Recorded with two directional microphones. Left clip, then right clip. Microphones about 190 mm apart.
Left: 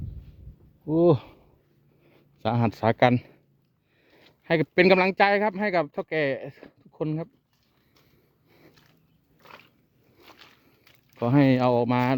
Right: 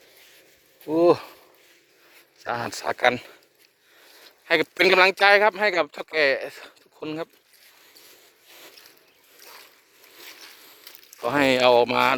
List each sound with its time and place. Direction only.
0.9 s speech: 20° left (ahead or behind)
2.5 s speech: 35° left (ahead or behind)
2.9 s speech: 20° left (ahead or behind)
4.4 s speech: 20° left (ahead or behind)
11.3 s speech: 15° left (ahead or behind)